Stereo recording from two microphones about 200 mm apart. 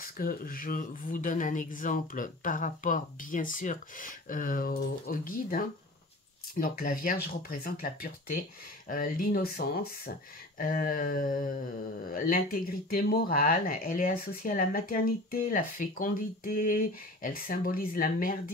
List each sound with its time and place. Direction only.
0.0 s speech: 45° left (ahead or behind)